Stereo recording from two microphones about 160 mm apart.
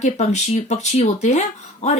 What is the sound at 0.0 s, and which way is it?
Speech, 45° left (ahead or behind).